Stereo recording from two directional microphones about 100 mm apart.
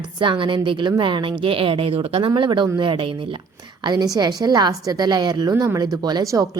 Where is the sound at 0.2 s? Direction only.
55° right (ahead or behind).